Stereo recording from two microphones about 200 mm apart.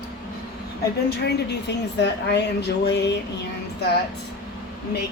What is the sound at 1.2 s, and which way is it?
Speech, 60° left (ahead or behind).